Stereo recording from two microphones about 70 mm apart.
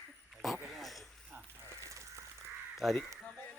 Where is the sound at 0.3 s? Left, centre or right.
Centre.